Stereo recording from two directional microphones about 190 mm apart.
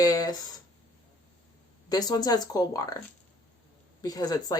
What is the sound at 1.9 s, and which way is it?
Speech, 20° left (ahead or behind).